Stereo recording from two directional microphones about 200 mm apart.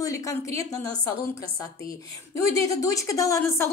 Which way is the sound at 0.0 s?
15° left (ahead or behind).